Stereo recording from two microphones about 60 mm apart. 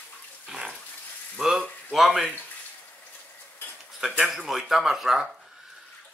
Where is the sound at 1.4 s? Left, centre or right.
Centre.